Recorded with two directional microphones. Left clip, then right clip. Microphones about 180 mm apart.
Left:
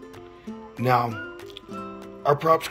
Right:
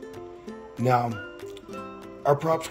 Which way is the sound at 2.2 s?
10° right (ahead or behind).